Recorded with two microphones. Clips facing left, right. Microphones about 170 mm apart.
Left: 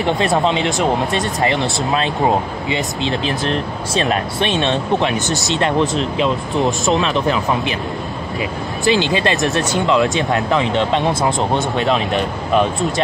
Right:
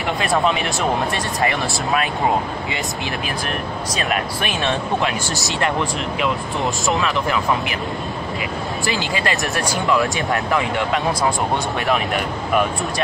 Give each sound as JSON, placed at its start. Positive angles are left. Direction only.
{"t": 0.5, "sound": "speech", "side_deg": 20}
{"t": 8.8, "sound": "speech", "side_deg": 20}